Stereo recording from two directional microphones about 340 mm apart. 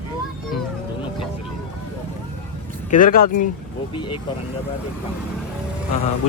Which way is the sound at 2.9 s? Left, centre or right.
Left.